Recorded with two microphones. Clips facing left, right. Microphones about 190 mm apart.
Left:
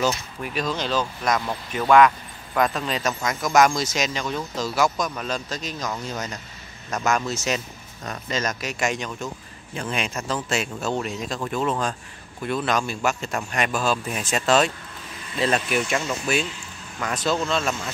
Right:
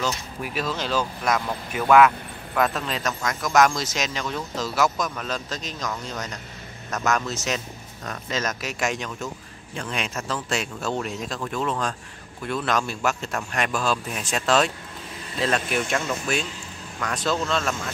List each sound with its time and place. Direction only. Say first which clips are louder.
0.4 s speech: left 1 dB; 5° right (ahead or behind)